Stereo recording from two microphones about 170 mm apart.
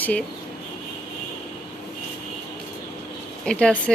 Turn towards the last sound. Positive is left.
turn(degrees=5)  # may be behind; listen again after turning